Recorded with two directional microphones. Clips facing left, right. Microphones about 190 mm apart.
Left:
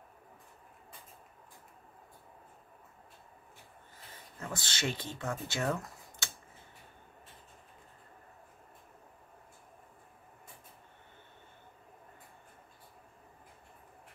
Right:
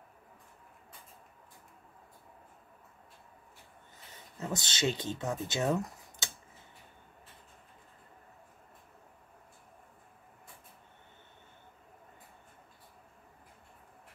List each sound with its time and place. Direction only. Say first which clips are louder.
4.4 s speech: right 4 dB; 20° right (ahead or behind)